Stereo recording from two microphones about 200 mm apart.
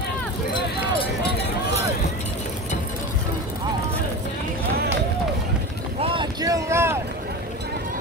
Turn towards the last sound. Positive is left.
turn(degrees=-15)  # may be behind; listen again after turning